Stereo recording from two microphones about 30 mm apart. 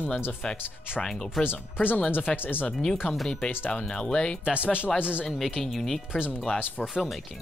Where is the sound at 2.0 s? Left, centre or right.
Left.